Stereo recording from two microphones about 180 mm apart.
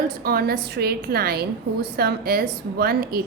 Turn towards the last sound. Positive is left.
turn(degrees=-60)  # may be behind; listen again after turning